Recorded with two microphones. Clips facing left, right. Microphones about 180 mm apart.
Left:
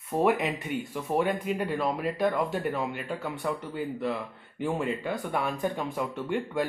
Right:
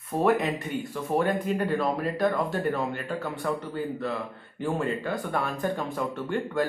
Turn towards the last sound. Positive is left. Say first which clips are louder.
# right 2 dB
turn(degrees=15)  # may be behind; listen again after turning